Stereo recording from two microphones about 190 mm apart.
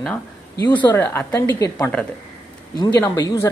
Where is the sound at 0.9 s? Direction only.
10° left (ahead or behind).